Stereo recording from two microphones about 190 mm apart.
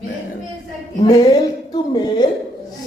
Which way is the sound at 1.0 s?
20° left (ahead or behind).